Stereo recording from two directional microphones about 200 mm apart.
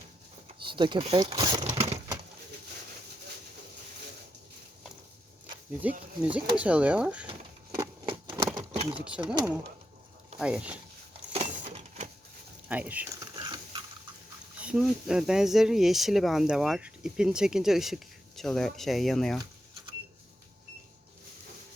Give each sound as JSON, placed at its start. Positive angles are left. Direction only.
{"t": 0.4, "sound": "speech", "side_deg": -25}
{"t": 5.8, "sound": "speech", "side_deg": -5}
{"t": 7.3, "sound": "a sound", "side_deg": -20}
{"t": 8.8, "sound": "speech", "side_deg": -25}
{"t": 10.3, "sound": "speech", "side_deg": -5}
{"t": 11.3, "sound": "a sound", "side_deg": -35}
{"t": 12.6, "sound": "speech", "side_deg": -5}
{"t": 13.3, "sound": "a sound", "side_deg": -20}
{"t": 14.6, "sound": "speech", "side_deg": -5}